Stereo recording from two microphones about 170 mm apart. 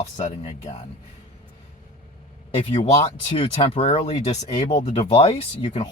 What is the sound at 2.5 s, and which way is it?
Speech, 35° left (ahead or behind).